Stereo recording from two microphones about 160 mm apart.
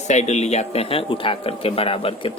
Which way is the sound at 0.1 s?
45° left (ahead or behind).